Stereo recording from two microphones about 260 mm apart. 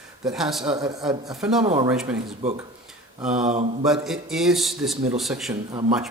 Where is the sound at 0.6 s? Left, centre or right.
Centre.